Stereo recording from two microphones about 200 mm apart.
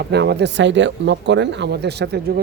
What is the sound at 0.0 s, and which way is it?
Speech, 55° right (ahead or behind).